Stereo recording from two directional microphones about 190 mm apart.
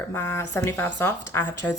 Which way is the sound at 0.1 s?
15° left (ahead or behind).